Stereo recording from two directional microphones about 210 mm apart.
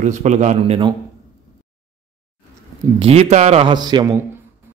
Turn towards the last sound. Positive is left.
turn(degrees=-20)  # may be behind; listen again after turning